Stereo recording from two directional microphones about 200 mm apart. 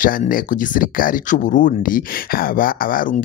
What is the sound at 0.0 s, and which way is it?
Speech, 45° left (ahead or behind).